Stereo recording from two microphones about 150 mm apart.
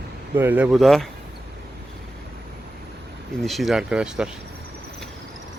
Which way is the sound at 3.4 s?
Centre (ahead or behind).